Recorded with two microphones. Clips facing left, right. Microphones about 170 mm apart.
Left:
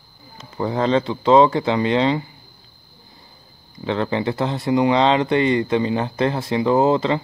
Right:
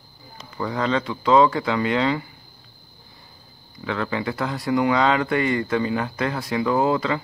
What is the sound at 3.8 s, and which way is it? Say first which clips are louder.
Speech: left 4 dB; 30° left (ahead or behind).